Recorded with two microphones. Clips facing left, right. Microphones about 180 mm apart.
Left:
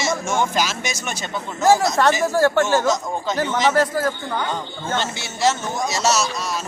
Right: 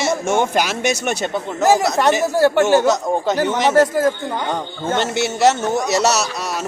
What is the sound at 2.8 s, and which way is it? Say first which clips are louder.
Speech: right 5 dB; 65° right (ahead or behind).